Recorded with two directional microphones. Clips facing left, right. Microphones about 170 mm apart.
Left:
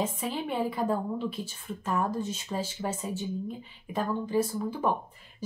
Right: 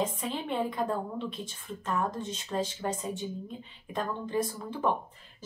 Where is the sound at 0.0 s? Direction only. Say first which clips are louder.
Left 1 dB; 5° left (ahead or behind).